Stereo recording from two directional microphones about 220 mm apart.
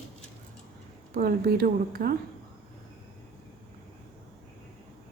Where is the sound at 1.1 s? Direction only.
45° right (ahead or behind).